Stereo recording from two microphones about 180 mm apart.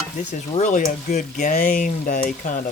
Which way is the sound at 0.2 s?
40° left (ahead or behind).